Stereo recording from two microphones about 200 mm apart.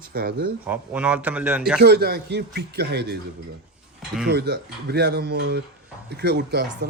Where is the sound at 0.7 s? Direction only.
5° right (ahead or behind).